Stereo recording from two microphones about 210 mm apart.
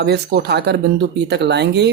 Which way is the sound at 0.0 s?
50° right (ahead or behind).